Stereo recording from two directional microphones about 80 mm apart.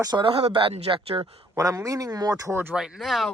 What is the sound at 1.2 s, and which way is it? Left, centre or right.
Speech, right.